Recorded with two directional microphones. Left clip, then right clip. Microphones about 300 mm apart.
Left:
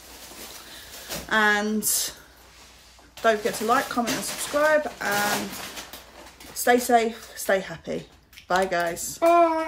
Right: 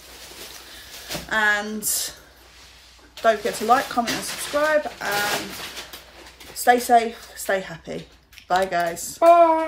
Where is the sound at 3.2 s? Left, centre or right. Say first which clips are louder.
Right 3 dB; centre.